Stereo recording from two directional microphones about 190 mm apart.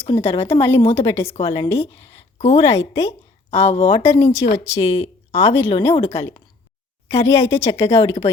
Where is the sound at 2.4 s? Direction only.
30° left (ahead or behind).